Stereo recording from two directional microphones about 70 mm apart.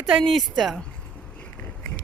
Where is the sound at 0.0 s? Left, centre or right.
Centre.